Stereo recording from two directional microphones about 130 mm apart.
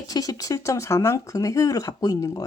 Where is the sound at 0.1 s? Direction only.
30° left (ahead or behind).